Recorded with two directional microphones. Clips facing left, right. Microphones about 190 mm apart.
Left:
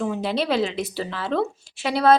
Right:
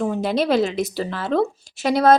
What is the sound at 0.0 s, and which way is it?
A woman's voice, 45° right (ahead or behind).